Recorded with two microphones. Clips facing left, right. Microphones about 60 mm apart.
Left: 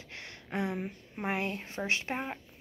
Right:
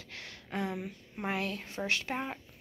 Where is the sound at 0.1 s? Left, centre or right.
Left.